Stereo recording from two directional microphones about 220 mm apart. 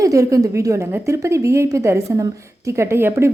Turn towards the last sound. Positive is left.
turn(degrees=-10)  # may be behind; listen again after turning